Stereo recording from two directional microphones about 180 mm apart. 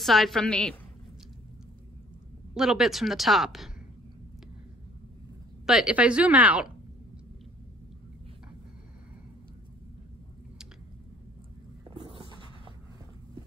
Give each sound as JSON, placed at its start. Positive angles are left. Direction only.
{"t": 0.0, "sound": "speech", "side_deg": 0}
{"t": 2.5, "sound": "speech", "side_deg": 0}
{"t": 5.7, "sound": "speech", "side_deg": -5}
{"t": 12.0, "sound": "a sound", "side_deg": -30}